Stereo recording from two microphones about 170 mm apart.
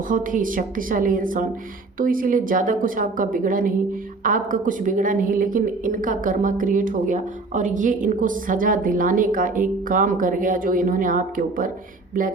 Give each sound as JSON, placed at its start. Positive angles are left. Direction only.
{"t": 0.1, "sound": "a woman's voice", "side_deg": -50}